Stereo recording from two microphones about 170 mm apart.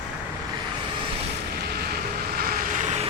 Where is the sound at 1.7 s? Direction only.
65° right (ahead or behind); by 3.0 s 45° right (ahead or behind).